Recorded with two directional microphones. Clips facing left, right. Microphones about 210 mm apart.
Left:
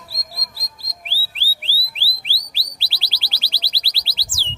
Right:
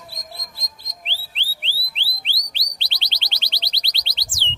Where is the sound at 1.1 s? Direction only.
5° left (ahead or behind).